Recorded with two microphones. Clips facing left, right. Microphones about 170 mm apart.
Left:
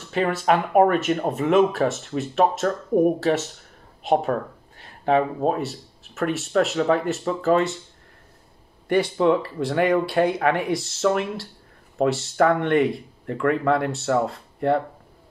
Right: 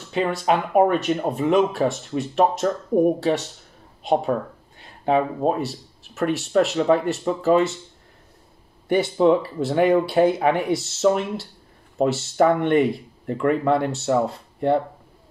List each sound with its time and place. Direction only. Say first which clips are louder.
0.1 s speech: even; centre (ahead or behind)
8.8 s speech: right 2 dB; 5° right (ahead or behind)
14.0 s speech: right 1 dB; 20° right (ahead or behind)